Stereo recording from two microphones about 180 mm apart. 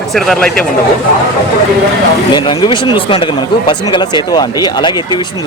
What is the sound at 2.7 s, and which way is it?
Speech, 25° left (ahead or behind).